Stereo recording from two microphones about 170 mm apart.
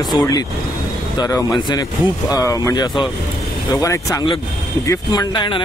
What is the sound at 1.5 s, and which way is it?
Speech, 25° left (ahead or behind).